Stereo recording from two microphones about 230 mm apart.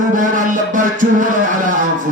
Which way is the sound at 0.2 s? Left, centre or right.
Right.